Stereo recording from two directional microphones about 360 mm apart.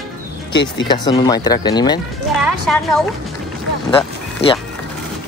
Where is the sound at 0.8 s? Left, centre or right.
Centre.